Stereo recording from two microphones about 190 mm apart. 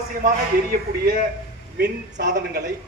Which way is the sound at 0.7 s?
55° right (ahead or behind).